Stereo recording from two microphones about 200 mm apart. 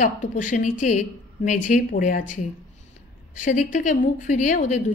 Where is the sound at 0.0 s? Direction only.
40° left (ahead or behind).